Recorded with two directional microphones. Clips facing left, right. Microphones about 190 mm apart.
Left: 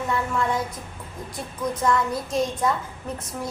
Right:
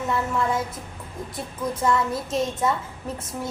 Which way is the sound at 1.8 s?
5° right (ahead or behind).